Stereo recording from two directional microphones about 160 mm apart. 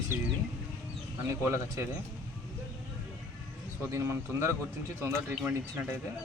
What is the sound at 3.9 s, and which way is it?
Speech, 15° right (ahead or behind).